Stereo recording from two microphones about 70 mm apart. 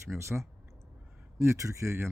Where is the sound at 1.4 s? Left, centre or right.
Right.